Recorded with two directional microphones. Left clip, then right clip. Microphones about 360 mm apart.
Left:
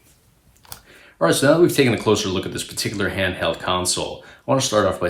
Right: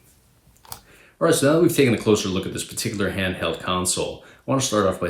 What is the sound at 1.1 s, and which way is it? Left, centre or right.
Speech, centre.